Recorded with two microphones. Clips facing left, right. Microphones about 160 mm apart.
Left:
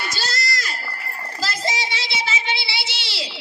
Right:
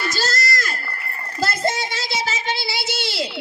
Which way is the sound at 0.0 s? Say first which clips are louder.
Right 4 dB; 45° right (ahead or behind).